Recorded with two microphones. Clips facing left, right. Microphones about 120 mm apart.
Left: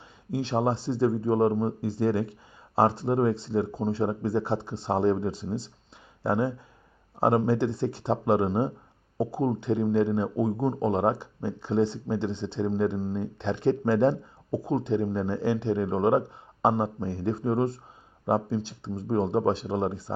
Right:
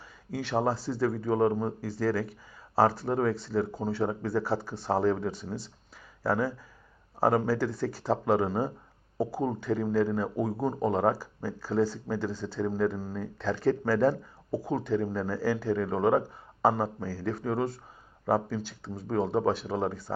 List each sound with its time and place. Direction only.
0.3 s speech: 25° left (ahead or behind)